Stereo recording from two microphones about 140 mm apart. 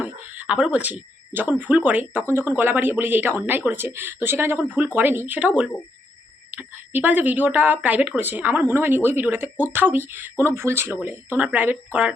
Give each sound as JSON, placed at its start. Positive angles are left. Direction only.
{"t": 0.0, "sound": "speech", "side_deg": -10}